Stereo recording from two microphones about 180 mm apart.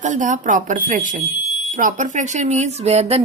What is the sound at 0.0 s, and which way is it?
A woman's voice, 45° right (ahead or behind).